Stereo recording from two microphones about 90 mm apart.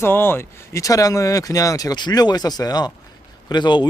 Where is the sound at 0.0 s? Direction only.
25° left (ahead or behind).